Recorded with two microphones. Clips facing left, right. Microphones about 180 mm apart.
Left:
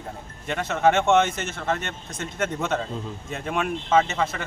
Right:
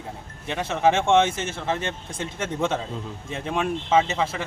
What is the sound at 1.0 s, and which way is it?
Speech, 30° right (ahead or behind).